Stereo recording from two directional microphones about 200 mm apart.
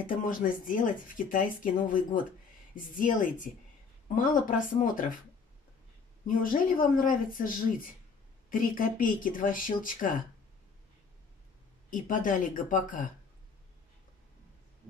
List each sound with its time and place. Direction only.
0.0 s speech: 40° left (ahead or behind)
6.2 s speech: 40° left (ahead or behind)
11.9 s speech: 40° left (ahead or behind)